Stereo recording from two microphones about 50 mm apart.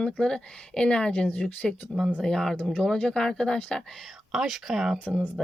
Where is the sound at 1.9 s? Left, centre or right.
Centre.